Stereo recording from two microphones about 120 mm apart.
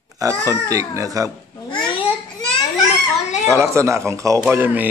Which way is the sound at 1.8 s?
45° left (ahead or behind).